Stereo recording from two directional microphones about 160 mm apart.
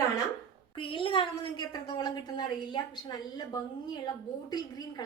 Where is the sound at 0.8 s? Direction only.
30° left (ahead or behind).